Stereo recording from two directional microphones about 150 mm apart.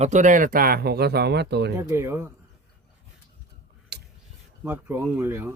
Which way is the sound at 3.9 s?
90° right.